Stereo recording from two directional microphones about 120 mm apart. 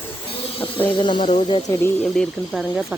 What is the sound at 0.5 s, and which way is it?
Speech, 45° left (ahead or behind).